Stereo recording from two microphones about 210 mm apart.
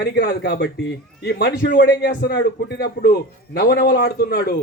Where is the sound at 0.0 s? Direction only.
50° left (ahead or behind).